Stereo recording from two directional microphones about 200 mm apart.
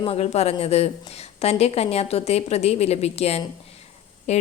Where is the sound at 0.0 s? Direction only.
30° left (ahead or behind).